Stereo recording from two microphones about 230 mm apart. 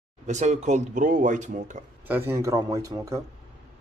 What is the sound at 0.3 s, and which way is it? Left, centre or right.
Speech, right.